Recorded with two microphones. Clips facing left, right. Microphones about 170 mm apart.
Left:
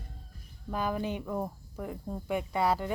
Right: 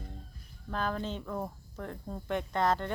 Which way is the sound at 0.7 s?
10° left (ahead or behind).